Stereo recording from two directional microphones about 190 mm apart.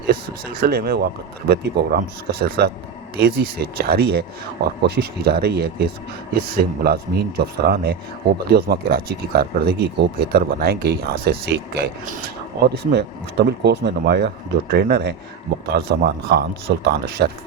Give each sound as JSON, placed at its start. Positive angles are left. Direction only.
{"t": 0.6, "sound": "speech", "side_deg": -55}
{"t": 12.6, "sound": "speech", "side_deg": -60}